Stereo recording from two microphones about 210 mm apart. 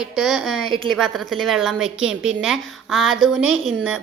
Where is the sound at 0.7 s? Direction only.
25° right (ahead or behind).